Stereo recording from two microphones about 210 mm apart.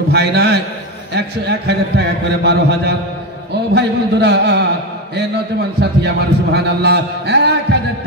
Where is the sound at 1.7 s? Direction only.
55° right (ahead or behind).